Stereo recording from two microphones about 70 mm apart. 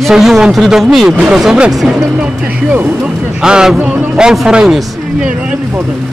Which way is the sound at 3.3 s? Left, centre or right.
Centre.